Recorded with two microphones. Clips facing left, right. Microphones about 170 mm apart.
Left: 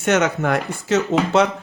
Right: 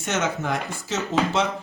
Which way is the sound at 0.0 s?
65° left (ahead or behind).